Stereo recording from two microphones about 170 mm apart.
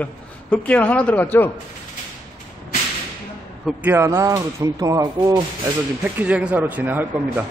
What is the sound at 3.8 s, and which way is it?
Speech, 15° right (ahead or behind).